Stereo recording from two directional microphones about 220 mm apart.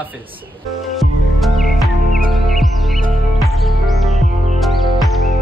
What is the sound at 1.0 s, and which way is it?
Music, centre (ahead or behind).